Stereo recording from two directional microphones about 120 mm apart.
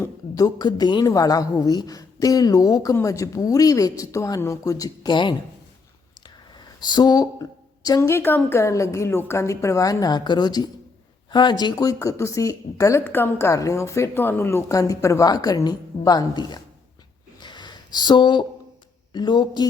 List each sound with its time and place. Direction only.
0.0 s a woman's voice: 30° left (ahead or behind)
6.7 s a woman's voice: 35° left (ahead or behind)
17.4 s a sound: 40° left (ahead or behind)
19.1 s a woman's voice: 40° left (ahead or behind)